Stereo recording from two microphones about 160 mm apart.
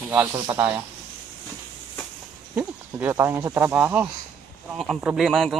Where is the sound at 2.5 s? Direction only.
15° right (ahead or behind).